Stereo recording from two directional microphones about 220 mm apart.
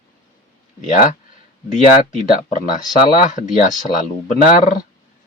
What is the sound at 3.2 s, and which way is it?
A man's voice, 35° left (ahead or behind).